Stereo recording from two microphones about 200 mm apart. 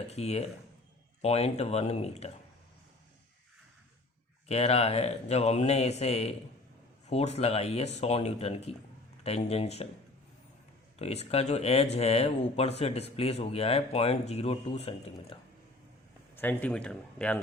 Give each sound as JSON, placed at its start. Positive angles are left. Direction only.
{"t": 0.1, "sound": "speech", "side_deg": 30}
{"t": 4.4, "sound": "speech", "side_deg": 30}
{"t": 10.9, "sound": "speech", "side_deg": 30}
{"t": 16.3, "sound": "speech", "side_deg": 10}